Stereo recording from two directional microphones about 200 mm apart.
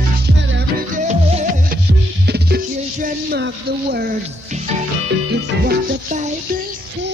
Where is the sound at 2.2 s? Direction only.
55° right (ahead or behind).